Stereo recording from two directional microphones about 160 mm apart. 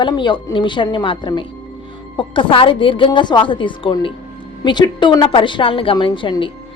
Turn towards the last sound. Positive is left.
turn(degrees=30)  # may be behind; listen again after turning